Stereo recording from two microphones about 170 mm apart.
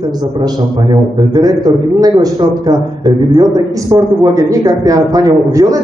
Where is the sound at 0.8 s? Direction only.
25° right (ahead or behind).